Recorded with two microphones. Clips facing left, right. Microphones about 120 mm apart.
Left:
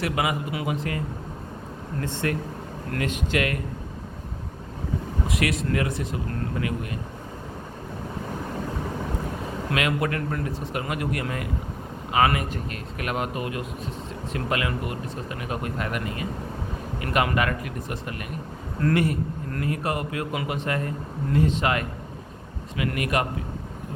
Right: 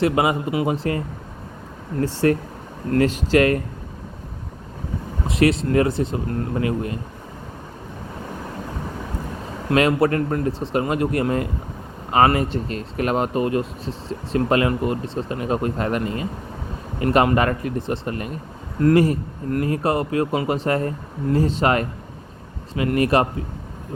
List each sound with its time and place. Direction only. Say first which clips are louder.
0.0 s speech: right 7 dB; 30° right (ahead or behind)
2.2 s speech: right 10 dB; 35° right (ahead or behind)
5.3 s speech: right 8 dB; 30° right (ahead or behind)
9.6 s speech: right 9 dB; 35° right (ahead or behind)